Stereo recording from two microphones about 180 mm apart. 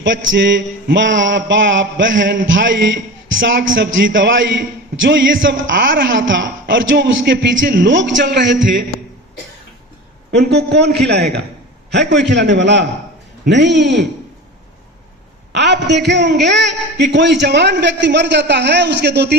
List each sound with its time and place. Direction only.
0.0 s a man's voice: 85° right
3.8 s a man's voice: 90° right
7.6 s a man's voice: 70° right (ahead or behind)
10.3 s a man's voice: 70° right (ahead or behind)
15.5 s a man's voice: 75° right (ahead or behind)